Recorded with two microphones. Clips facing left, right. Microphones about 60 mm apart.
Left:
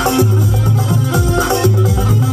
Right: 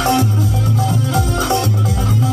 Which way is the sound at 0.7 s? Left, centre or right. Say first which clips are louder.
Even; left.